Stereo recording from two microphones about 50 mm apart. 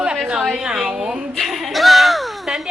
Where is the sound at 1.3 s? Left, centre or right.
Centre.